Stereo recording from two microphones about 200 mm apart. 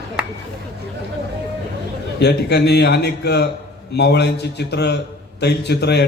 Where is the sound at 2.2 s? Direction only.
55° left (ahead or behind).